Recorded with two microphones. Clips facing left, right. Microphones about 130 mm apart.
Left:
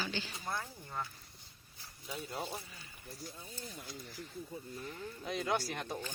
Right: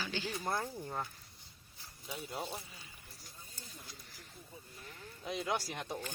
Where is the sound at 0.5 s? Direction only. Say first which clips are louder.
Even; 30° right (ahead or behind).